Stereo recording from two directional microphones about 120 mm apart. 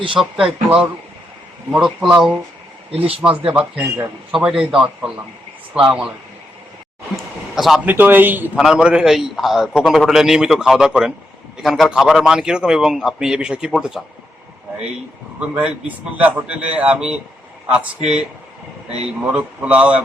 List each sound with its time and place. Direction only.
0.2 s a man's voice: 5° right (ahead or behind)
4.4 s a man's voice: 5° right (ahead or behind)
7.5 s speech: centre (ahead or behind)
7.9 s a man's voice: 15° right (ahead or behind)
8.5 s a man's voice: 5° right (ahead or behind)
15.4 s a man's voice: 10° right (ahead or behind)
19.3 s a man's voice: 10° right (ahead or behind)